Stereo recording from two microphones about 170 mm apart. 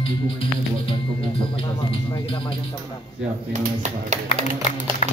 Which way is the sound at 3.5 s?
45° right (ahead or behind).